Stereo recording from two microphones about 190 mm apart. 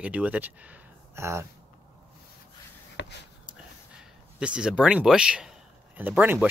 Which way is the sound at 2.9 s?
65° left (ahead or behind).